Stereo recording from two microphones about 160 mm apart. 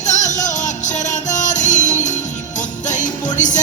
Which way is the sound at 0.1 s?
50° left (ahead or behind).